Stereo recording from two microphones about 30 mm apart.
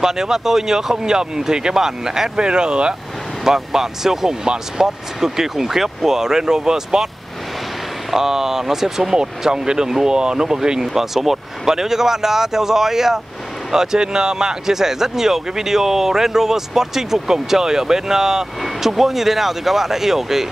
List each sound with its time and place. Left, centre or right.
0.0 s speech: centre
2.3 s speech: right
3.4 s speech: centre
8.1 s speech: centre
11.0 s speech: centre